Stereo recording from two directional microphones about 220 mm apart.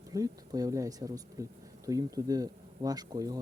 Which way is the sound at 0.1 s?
15° right (ahead or behind).